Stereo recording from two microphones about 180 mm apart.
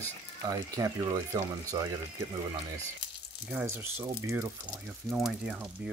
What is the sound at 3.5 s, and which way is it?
Speech, 10° right (ahead or behind).